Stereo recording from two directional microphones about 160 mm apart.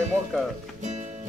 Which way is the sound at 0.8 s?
45° right (ahead or behind).